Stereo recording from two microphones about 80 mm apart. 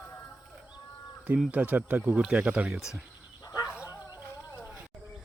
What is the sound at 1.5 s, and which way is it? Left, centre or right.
Speech, centre.